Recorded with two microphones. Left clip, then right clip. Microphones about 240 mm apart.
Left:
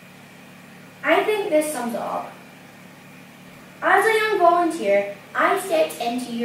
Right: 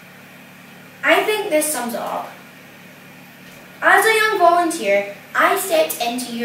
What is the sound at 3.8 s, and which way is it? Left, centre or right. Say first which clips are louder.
A woman's voice: right 4 dB; centre.